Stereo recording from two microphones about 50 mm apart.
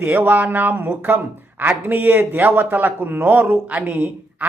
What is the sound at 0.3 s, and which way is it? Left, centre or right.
Speech, right.